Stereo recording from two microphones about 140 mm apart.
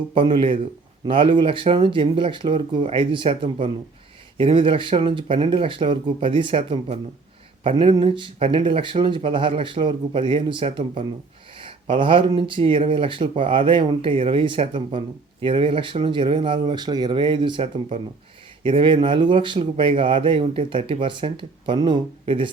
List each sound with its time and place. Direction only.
0.1 s speech: 35° right (ahead or behind)